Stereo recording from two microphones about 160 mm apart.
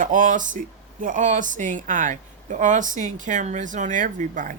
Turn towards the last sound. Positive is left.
turn(degrees=-55)  # may be behind; listen again after turning